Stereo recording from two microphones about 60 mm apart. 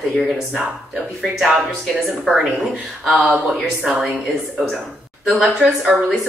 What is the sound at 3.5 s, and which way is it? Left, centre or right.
Speech, centre.